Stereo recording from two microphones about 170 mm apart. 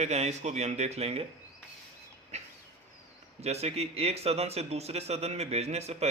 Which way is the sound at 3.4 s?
40° right (ahead or behind).